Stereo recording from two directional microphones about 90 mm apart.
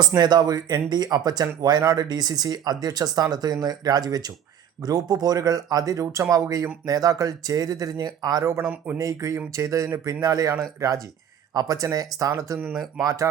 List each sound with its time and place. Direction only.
0.2 s speech: 50° right (ahead or behind)
8.6 s speech: 20° right (ahead or behind)
9.0 s speech: 40° right (ahead or behind)